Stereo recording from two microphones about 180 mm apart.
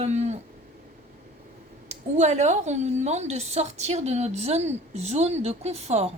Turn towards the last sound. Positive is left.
turn(degrees=-35)  # may be behind; listen again after turning